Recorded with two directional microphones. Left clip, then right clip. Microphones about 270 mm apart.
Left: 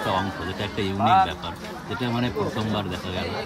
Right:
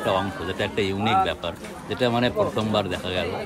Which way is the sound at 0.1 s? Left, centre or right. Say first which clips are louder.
Right 1 dB; centre.